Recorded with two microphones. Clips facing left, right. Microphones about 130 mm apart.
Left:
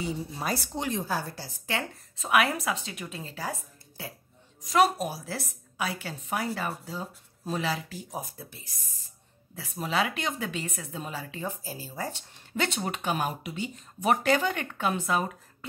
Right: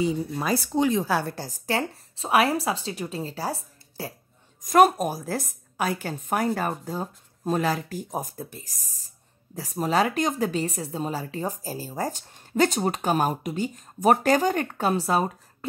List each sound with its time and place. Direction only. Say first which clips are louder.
0.9 s a woman's voice: right 6 dB; 80° right; by 4.1 s 35° right (ahead or behind)
4.6 s a woman's voice: right 6 dB; 50° right (ahead or behind)